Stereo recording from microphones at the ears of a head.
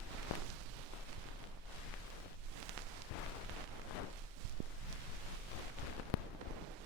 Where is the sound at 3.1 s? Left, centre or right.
Left.